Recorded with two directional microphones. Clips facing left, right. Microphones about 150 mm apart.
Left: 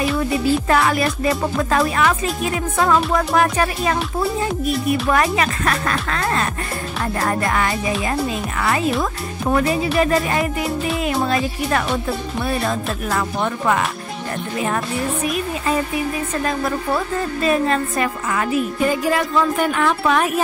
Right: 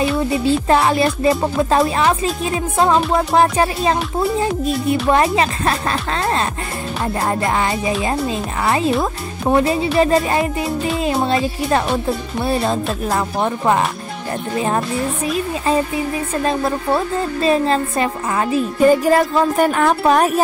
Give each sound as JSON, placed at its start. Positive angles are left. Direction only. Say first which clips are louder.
{"t": 0.3, "sound": "music", "louder": "right 2 dB", "side_deg": -25}
{"t": 15.2, "sound": "music", "louder": "right 2 dB", "side_deg": -30}
{"t": 18.9, "sound": "music", "louder": "right 6 dB", "side_deg": -40}